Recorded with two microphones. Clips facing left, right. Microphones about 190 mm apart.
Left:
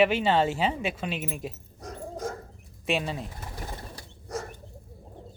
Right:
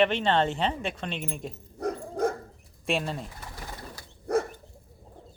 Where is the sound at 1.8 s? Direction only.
60° right (ahead or behind).